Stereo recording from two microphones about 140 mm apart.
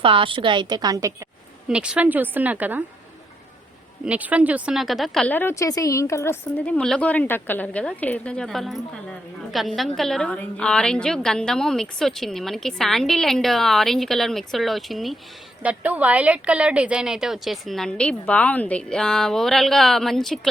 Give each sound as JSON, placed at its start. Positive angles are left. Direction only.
{"t": 0.0, "sound": "a woman's voice", "side_deg": -40}
{"t": 1.6, "sound": "a woman's voice", "side_deg": -5}
{"t": 4.0, "sound": "a woman's voice", "side_deg": -10}
{"t": 6.7, "sound": "a woman's voice", "side_deg": 5}
{"t": 15.6, "sound": "a woman's voice", "side_deg": -10}